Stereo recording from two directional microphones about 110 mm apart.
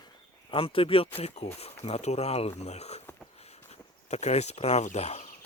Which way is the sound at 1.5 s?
65° left (ahead or behind).